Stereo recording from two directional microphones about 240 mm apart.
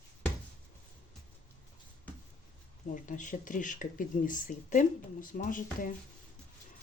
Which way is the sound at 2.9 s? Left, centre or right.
Left.